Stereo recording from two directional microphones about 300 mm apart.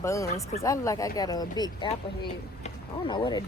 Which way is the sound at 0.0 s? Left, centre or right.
Centre.